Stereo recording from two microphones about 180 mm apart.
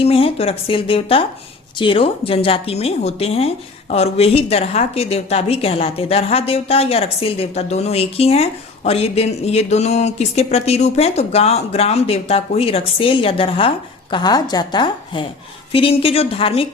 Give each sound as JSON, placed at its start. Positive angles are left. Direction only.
{"t": 0.0, "sound": "a woman's voice", "side_deg": 35}